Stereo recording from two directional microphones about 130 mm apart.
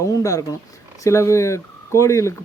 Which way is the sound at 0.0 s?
25° left (ahead or behind).